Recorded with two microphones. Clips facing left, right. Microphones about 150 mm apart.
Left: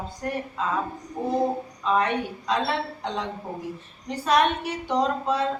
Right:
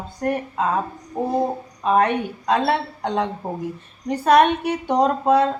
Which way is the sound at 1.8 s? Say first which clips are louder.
Right 6 dB; 55° right (ahead or behind).